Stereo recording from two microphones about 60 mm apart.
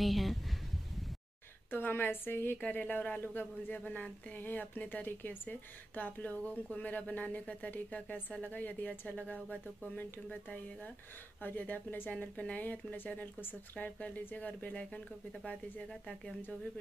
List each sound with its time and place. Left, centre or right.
0.0 s a sound: centre
1.7 s a woman's voice: left
2.6 s speech: left
15.9 s speech: centre